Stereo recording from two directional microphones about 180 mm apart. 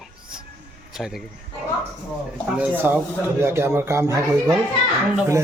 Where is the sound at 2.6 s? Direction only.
10° right (ahead or behind).